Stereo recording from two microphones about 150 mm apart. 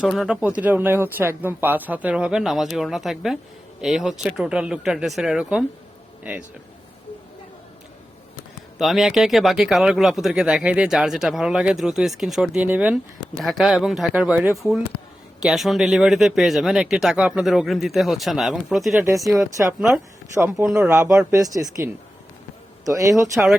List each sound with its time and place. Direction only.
0.0 s speech: 5° right (ahead or behind)
8.8 s speech: centre (ahead or behind)
13.4 s speech: centre (ahead or behind)
19.4 s speech: 20° right (ahead or behind)
22.9 s speech: 20° right (ahead or behind)